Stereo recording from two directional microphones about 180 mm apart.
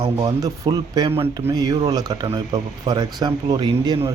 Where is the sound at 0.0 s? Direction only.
20° right (ahead or behind).